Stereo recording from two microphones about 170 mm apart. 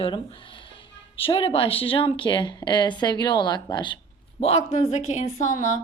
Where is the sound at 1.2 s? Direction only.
35° left (ahead or behind).